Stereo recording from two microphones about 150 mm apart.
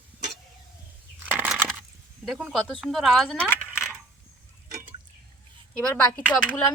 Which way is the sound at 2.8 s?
Centre (ahead or behind).